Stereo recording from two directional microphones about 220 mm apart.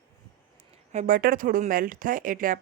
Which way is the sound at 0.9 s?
40° right (ahead or behind).